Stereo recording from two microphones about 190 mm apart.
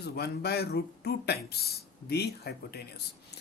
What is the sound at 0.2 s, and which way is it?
Speech, 60° left (ahead or behind).